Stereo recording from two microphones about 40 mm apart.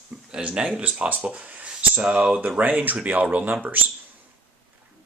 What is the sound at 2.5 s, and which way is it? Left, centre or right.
Speech, right.